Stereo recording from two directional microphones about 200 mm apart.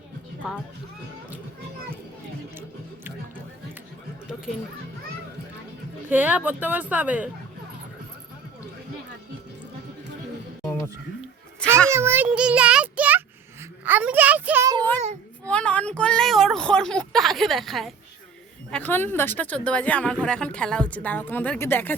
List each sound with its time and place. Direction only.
2.6 s speech: 10° right (ahead or behind)
6.1 s speech: 10° right (ahead or behind)
10.6 s a sound: 15° left (ahead or behind)
11.9 s a child's voice: 10° right (ahead or behind)
15.4 s speech: 5° left (ahead or behind)